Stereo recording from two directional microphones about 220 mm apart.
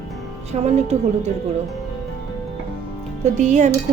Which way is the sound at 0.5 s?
30° right (ahead or behind).